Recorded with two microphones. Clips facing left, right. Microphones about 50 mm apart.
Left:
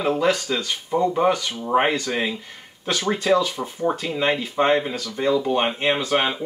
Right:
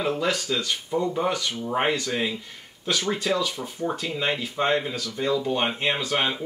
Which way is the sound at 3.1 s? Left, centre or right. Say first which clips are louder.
Left 8 dB; left.